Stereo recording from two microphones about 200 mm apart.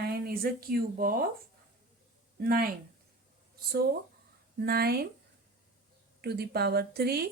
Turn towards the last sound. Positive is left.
turn(degrees=-50)  # may be behind; listen again after turning